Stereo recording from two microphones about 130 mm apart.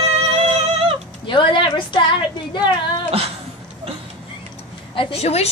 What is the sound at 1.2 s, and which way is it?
A woman's voice, 40° left (ahead or behind).